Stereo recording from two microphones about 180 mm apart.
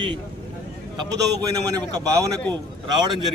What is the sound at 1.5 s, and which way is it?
Speech, 20° right (ahead or behind).